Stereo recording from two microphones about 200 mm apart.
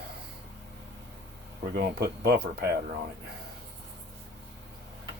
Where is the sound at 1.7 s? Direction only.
50° right (ahead or behind).